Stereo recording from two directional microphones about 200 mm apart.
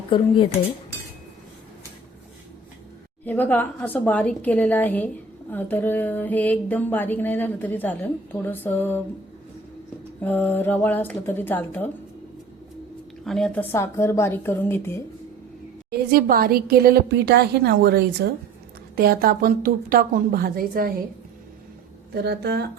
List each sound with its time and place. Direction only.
3.2 s a woman's voice: 10° left (ahead or behind)
10.2 s a woman's voice: 10° left (ahead or behind)
13.2 s a woman's voice: 5° left (ahead or behind)
15.9 s speech: 50° right (ahead or behind)
22.1 s speech: 55° right (ahead or behind)